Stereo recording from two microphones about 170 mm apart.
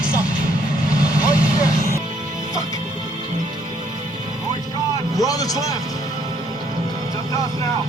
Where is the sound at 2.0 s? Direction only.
45° right (ahead or behind).